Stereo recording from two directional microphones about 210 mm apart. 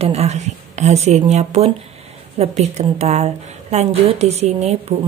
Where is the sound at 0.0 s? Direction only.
30° right (ahead or behind).